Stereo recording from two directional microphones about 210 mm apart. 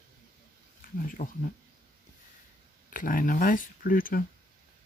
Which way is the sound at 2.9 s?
40° left (ahead or behind).